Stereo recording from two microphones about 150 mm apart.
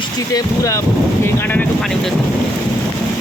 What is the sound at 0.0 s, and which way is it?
Speech, 25° left (ahead or behind).